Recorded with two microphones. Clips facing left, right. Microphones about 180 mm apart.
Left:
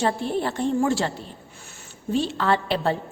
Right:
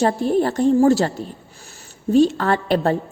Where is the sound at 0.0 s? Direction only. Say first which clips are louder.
Right 6 dB; 40° right (ahead or behind).